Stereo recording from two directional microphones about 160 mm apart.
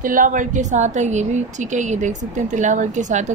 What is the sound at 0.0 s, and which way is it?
A woman's voice, 60° right (ahead or behind).